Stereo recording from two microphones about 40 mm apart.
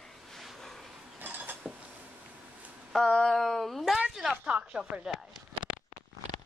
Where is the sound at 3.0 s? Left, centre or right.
Left.